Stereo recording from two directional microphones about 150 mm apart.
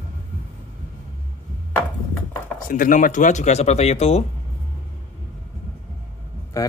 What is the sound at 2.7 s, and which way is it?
Speech, 65° left (ahead or behind).